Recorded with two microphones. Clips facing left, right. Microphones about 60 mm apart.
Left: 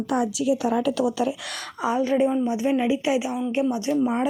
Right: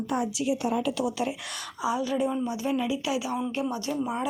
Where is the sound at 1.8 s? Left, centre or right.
Left.